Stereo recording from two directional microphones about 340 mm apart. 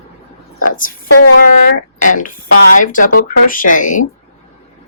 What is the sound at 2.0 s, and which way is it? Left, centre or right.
Speech, left.